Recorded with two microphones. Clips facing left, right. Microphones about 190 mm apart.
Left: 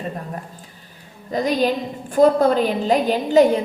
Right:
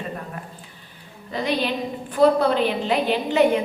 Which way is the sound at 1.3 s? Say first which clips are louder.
Left 5 dB; 40° left (ahead or behind).